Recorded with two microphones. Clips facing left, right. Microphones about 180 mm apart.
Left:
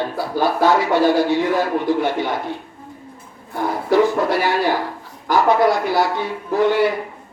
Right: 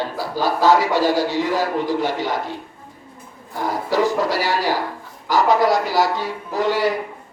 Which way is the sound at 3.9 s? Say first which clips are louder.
Left 4 dB; 55° left (ahead or behind).